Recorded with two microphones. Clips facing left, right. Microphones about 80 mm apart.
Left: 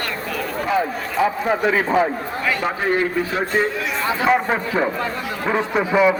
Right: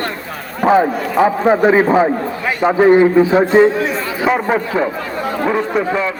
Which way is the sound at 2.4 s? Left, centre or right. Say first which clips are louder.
Right 10 dB; right.